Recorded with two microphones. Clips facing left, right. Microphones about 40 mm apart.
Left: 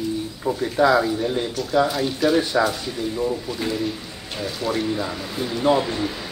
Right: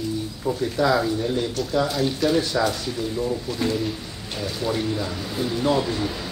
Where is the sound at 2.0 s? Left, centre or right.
Centre.